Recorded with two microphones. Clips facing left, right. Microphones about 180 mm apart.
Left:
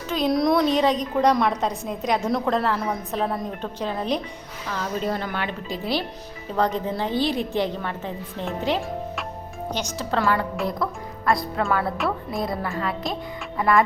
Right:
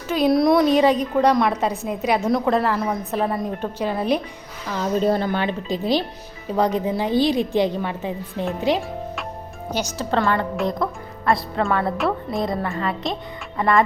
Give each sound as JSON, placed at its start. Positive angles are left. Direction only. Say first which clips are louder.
{"t": 0.1, "sound": "a woman's voice", "louder": "right 4 dB", "side_deg": -5}
{"t": 5.0, "sound": "a woman's voice", "louder": "right 6 dB", "side_deg": -30}
{"t": 10.0, "sound": "a woman's voice", "louder": "right 2 dB", "side_deg": 0}